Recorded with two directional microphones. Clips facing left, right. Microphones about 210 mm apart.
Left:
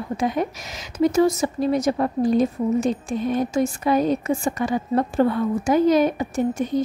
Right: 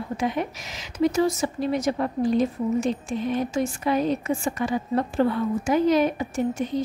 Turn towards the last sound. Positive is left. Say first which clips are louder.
# left 3 dB
turn(degrees=45)  # may be behind; listen again after turning